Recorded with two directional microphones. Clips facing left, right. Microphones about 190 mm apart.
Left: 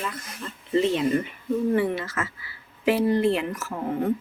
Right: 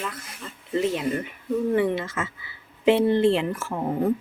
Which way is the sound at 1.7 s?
20° right (ahead or behind).